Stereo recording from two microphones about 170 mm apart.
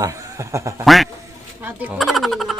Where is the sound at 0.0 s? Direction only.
20° right (ahead or behind).